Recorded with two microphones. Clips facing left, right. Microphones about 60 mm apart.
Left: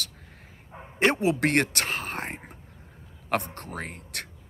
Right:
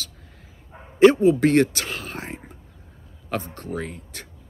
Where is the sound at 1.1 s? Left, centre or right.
Left.